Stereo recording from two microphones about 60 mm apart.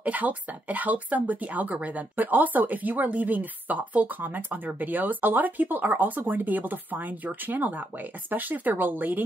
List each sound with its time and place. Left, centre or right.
0.0 s speech: right